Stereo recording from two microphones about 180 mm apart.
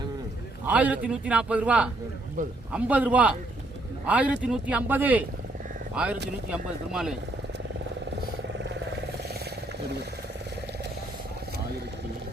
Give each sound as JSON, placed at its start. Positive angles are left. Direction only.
{"t": 0.6, "sound": "a man's voice", "side_deg": -10}